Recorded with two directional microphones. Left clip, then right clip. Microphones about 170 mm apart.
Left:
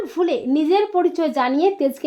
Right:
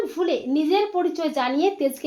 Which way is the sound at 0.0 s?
55° left (ahead or behind).